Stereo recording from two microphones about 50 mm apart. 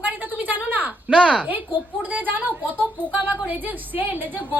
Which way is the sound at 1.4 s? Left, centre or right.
Right.